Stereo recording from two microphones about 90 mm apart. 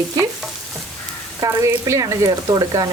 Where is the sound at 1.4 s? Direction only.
35° right (ahead or behind).